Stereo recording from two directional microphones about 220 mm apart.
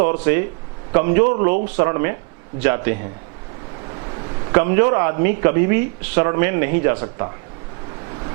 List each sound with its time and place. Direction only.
0.0 s a man's voice: 15° right (ahead or behind)